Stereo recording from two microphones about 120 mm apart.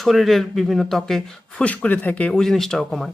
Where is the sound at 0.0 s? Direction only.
Centre (ahead or behind).